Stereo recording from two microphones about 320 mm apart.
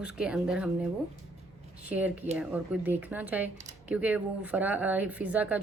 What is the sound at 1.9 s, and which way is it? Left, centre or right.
Speech, centre.